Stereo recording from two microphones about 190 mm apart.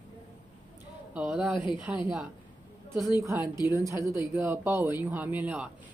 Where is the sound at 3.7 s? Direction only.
15° right (ahead or behind).